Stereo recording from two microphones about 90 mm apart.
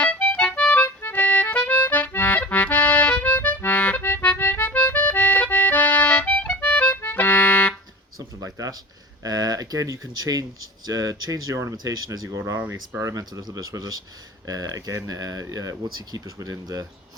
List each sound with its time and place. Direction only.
0.0 s accordion: 15° left (ahead or behind)
8.4 s a sound: 40° right (ahead or behind)
9.2 s speech: 45° right (ahead or behind)